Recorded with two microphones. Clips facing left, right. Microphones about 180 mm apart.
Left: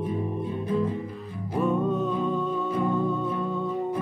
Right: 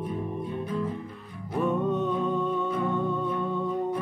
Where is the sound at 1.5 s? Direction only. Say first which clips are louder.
Left 1 dB; centre (ahead or behind).